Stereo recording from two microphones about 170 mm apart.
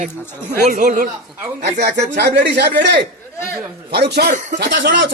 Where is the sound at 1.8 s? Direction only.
80° right.